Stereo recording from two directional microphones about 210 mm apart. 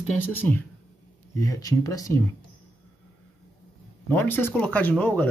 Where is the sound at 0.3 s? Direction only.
10° left (ahead or behind).